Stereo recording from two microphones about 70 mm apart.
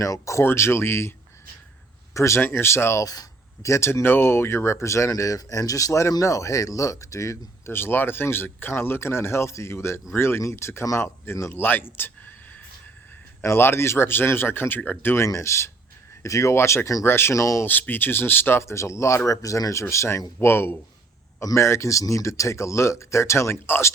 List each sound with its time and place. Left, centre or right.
0.0 s speech: left
2.1 s speech: left
3.0 s speech: left
13.4 s speech: left
17.1 s speech: left
17.3 s speech: left
17.7 s speech: left
18.6 s speech: left